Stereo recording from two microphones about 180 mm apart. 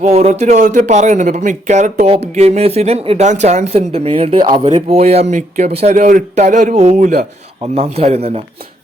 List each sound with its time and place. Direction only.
0.0 s speech: 40° right (ahead or behind)